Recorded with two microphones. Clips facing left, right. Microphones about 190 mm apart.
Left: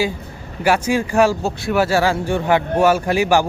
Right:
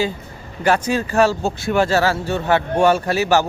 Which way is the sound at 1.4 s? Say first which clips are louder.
Even; centre (ahead or behind).